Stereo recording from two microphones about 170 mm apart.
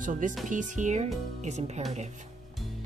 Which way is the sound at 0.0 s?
50° right (ahead or behind).